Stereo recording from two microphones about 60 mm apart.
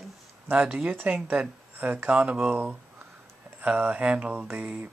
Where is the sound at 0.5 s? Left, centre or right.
Right.